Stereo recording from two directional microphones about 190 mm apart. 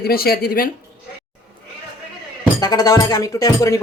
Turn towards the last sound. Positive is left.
turn(degrees=15)  # may be behind; listen again after turning